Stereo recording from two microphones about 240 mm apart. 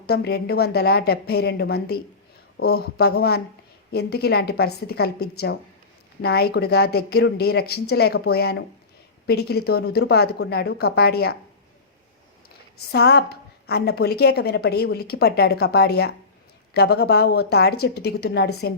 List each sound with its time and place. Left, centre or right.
0.1 s speech: left
12.9 s a woman's voice: left